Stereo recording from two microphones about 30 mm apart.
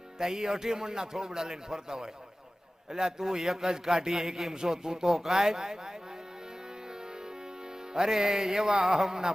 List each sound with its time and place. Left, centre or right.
0.2 s speech: right
5.1 s speech: centre
7.1 s music: right